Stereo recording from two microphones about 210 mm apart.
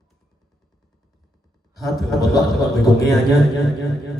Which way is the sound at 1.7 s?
Centre (ahead or behind).